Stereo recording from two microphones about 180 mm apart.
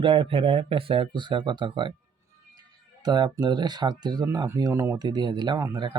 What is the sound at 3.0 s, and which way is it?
Speech, 25° right (ahead or behind).